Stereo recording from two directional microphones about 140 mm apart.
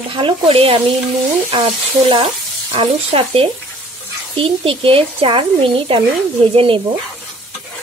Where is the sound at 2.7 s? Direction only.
45° right (ahead or behind).